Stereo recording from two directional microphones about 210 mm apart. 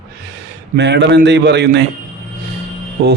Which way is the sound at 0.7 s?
55° right (ahead or behind).